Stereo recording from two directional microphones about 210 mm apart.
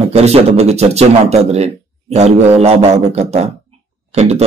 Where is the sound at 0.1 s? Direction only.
30° right (ahead or behind).